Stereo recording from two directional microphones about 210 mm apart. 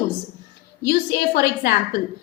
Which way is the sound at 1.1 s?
50° left (ahead or behind).